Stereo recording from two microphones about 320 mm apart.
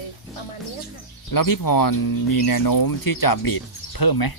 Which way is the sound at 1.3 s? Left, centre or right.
Left.